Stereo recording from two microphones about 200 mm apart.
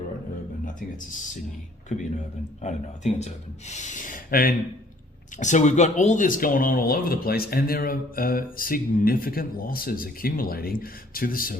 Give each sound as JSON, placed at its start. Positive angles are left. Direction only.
{"t": 1.9, "sound": "speech", "side_deg": 35}